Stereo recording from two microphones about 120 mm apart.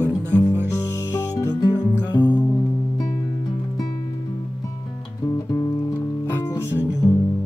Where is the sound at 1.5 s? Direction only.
35° left (ahead or behind).